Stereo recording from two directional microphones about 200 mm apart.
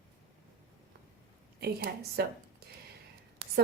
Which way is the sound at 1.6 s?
55° right (ahead or behind).